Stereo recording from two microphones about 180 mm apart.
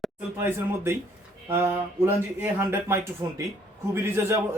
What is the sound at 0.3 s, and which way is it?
Speech, 15° right (ahead or behind).